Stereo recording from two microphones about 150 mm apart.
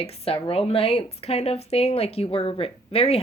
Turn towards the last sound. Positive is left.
turn(degrees=40)  # may be behind; listen again after turning